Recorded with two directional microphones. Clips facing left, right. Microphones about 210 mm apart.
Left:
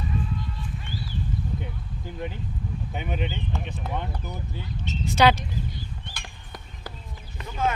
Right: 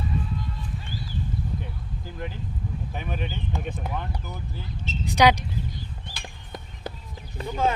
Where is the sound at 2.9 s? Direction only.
20° left (ahead or behind).